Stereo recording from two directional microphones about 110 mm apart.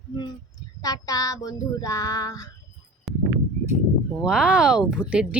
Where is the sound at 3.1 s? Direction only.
Centre (ahead or behind).